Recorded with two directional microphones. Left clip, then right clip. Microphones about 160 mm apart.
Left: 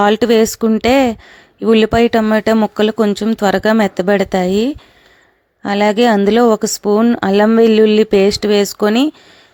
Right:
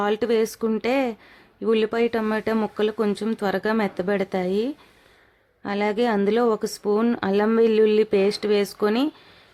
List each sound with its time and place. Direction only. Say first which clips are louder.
0.0 s speech: left 10 dB; 45° left (ahead or behind)